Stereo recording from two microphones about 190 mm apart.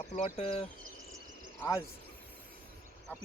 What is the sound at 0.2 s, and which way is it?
Speech, 35° left (ahead or behind).